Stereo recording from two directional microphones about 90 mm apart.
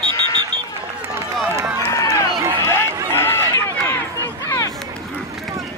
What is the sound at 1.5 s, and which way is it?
Run, 30° right (ahead or behind).